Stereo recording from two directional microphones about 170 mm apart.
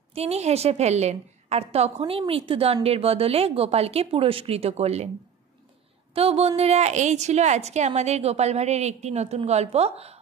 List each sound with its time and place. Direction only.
0.1 s a woman's voice: 40° right (ahead or behind)
6.1 s a woman's voice: 35° right (ahead or behind)